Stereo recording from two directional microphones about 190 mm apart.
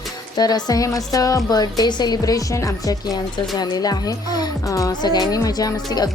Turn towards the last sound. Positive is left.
turn(degrees=20)  # may be behind; listen again after turning